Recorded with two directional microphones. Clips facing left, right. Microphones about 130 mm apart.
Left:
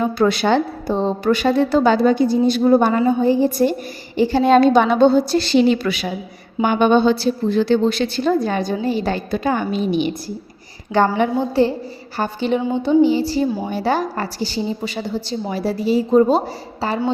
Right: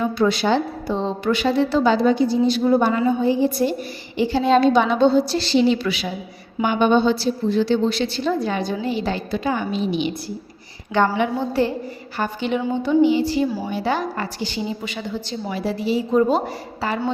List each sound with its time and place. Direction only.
0.0 s a woman's voice: 55° left (ahead or behind)
11.3 s a woman's voice: 30° left (ahead or behind)